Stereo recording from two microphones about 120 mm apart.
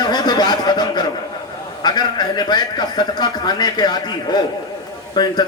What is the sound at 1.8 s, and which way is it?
A man's voice, 35° left (ahead or behind).